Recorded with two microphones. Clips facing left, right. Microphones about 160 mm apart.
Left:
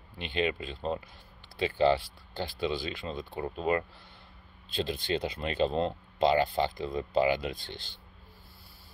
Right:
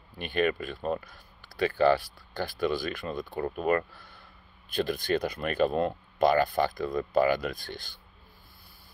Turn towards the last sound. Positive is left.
turn(degrees=20)  # may be behind; listen again after turning